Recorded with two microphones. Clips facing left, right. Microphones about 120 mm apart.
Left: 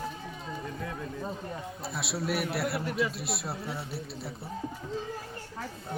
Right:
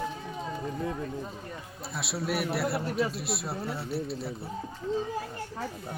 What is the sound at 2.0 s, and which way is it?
Speech, centre (ahead or behind).